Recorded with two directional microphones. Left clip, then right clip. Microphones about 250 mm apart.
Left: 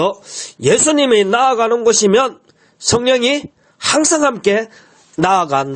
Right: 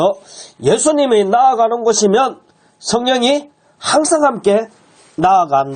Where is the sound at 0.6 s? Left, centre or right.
Left.